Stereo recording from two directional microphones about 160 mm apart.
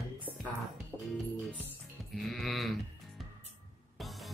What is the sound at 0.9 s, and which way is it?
Music, 10° right (ahead or behind).